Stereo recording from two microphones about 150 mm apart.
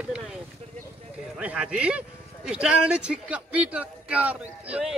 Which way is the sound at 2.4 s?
5° right (ahead or behind).